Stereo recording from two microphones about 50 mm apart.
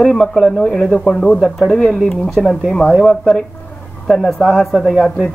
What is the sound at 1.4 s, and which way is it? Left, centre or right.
Speech, centre.